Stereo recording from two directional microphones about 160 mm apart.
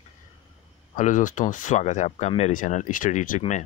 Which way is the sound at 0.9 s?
50° left (ahead or behind).